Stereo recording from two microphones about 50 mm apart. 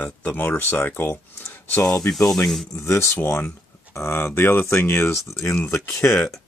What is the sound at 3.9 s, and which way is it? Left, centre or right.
Speech, left.